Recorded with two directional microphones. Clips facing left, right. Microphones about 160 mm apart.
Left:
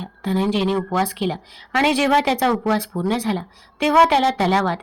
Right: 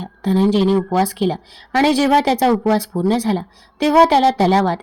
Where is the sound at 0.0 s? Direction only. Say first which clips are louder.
Right 5 dB; 40° right (ahead or behind).